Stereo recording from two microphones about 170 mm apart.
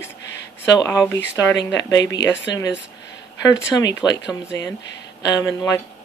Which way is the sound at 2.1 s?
90° left.